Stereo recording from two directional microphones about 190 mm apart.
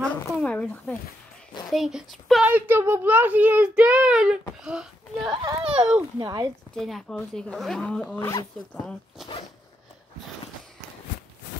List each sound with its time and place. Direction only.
0.0 s a child's voice: 5° left (ahead or behind)
5.3 s a child's voice: 25° right (ahead or behind)
5.7 s a child's voice: 5° right (ahead or behind)
6.1 s a child's voice: 20° right (ahead or behind)
6.7 s a child's voice: 5° left (ahead or behind)